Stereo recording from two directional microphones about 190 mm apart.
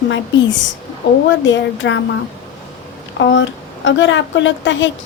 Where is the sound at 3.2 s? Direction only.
75° left (ahead or behind).